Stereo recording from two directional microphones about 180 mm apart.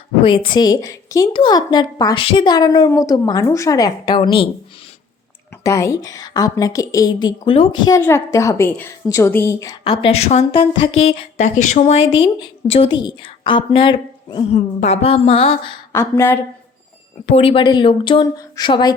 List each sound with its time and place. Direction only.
0.2 s a woman's voice: 30° left (ahead or behind)
5.6 s a woman's voice: 15° left (ahead or behind)
9.8 s speech: 30° left (ahead or behind)
12.1 s a woman's voice: 25° left (ahead or behind)
15.9 s speech: 15° left (ahead or behind)
17.2 s a woman's voice: 35° left (ahead or behind)